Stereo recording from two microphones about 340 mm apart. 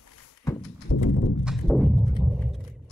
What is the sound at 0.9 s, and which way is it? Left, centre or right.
Horse, left.